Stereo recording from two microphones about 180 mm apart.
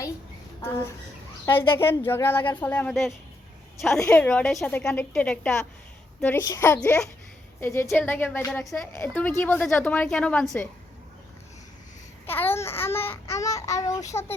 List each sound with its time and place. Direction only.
0.6 s a woman's voice: 10° left (ahead or behind)
6.2 s a woman's voice: 15° left (ahead or behind)
12.2 s a woman's voice: 10° left (ahead or behind)